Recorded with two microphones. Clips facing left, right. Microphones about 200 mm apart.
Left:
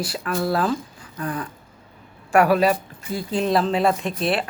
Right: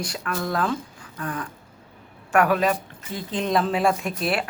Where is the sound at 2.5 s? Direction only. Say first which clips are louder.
Left 3 dB; 35° left (ahead or behind).